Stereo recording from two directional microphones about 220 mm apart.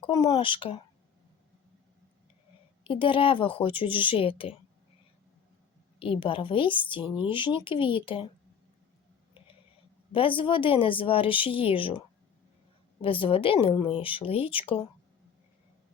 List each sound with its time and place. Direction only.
0.0 s a woman's voice: 20° left (ahead or behind)
2.8 s a woman's voice: 25° left (ahead or behind)
6.0 s a woman's voice: 25° left (ahead or behind)
7.0 s speech: 5° right (ahead or behind)
7.3 s a woman's voice: 20° left (ahead or behind)
10.1 s a woman's voice: 25° left (ahead or behind)